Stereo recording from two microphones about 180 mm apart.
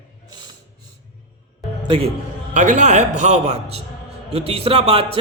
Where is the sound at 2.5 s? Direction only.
45° right (ahead or behind).